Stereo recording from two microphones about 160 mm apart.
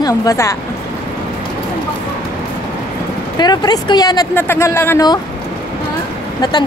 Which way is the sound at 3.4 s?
25° left (ahead or behind).